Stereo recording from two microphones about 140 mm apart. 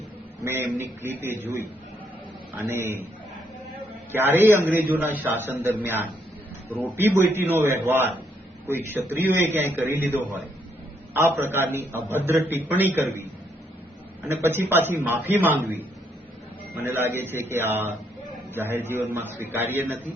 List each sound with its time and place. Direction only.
0.4 s a man's voice: 20° right (ahead or behind)
4.1 s a man's voice: 15° right (ahead or behind)
14.3 s a man's voice: 15° right (ahead or behind)
16.8 s a man's voice: 15° right (ahead or behind)